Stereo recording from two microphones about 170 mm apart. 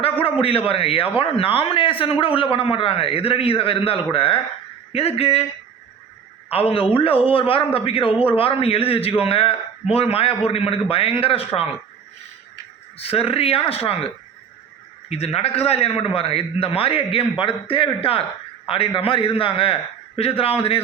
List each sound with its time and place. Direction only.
0.0 s a man's voice: 30° left (ahead or behind)
6.5 s a man's voice: 35° left (ahead or behind)
13.0 s a man's voice: 35° left (ahead or behind)
15.1 s a man's voice: 35° left (ahead or behind)